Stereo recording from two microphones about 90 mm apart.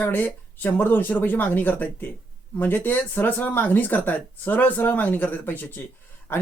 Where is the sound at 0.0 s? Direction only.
20° left (ahead or behind).